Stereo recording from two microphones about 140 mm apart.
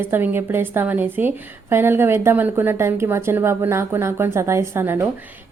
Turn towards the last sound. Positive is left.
turn(degrees=-15)  # may be behind; listen again after turning